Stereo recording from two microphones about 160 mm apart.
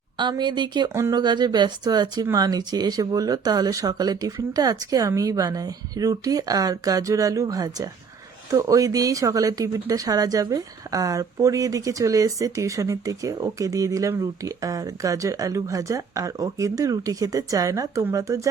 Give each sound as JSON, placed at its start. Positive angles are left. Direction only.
{"t": 0.2, "sound": "speech", "side_deg": -30}